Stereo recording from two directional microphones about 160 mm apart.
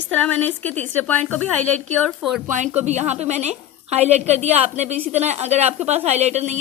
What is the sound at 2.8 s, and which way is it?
A woman's voice, 45° right (ahead or behind).